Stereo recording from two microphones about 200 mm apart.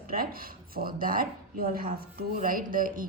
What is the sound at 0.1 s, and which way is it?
Speech, 45° right (ahead or behind).